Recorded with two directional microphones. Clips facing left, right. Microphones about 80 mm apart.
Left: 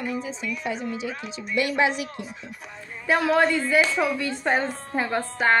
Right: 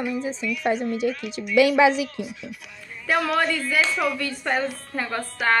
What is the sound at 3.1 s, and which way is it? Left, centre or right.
Speech, left.